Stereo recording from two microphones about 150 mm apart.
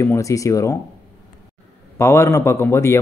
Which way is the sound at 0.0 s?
20° left (ahead or behind).